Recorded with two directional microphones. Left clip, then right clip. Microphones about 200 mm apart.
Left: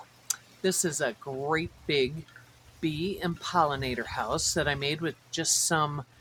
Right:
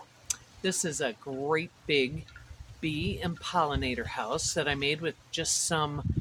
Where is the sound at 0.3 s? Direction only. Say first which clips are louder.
Left 3 dB; 15° left (ahead or behind).